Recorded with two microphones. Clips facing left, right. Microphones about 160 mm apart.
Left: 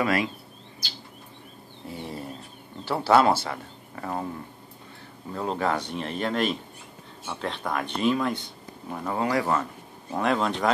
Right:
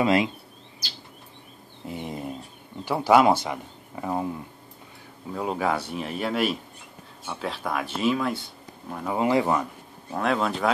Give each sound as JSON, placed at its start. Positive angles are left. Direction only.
{"t": 0.0, "sound": "speech", "side_deg": -25}
{"t": 1.9, "sound": "a sound", "side_deg": -20}
{"t": 2.8, "sound": "speech", "side_deg": -15}
{"t": 5.3, "sound": "speech", "side_deg": -10}
{"t": 9.1, "sound": "speech", "side_deg": -20}
{"t": 10.1, "sound": "speech", "side_deg": 0}